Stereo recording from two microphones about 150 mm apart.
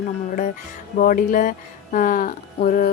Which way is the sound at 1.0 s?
65° left (ahead or behind).